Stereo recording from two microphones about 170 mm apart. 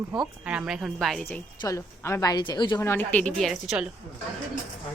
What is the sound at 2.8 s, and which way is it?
A woman's voice, 15° left (ahead or behind).